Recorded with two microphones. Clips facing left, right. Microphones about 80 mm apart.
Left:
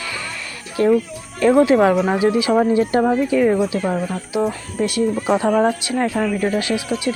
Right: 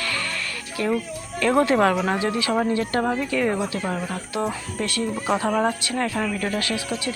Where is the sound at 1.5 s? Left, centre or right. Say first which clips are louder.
Left 4 dB; centre.